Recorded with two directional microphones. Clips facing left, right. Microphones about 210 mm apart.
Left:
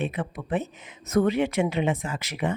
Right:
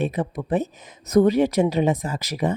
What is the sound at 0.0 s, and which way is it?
Speech, 40° right (ahead or behind).